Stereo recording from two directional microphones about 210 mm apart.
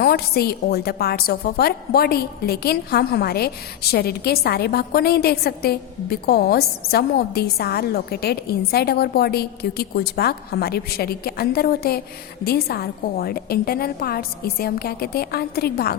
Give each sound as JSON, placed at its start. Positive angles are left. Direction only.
{"t": 0.0, "sound": "a woman's voice", "side_deg": 50}